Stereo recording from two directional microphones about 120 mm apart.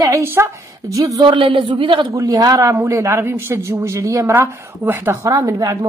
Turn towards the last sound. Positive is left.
turn(degrees=-30)  # may be behind; listen again after turning